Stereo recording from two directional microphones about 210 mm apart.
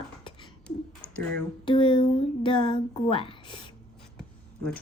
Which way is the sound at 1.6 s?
25° left (ahead or behind).